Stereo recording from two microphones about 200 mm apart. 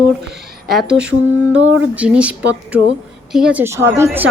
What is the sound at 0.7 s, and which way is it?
Speech, 5° right (ahead or behind).